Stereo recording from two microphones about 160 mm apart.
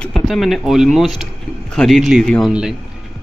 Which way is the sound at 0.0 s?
Centre (ahead or behind).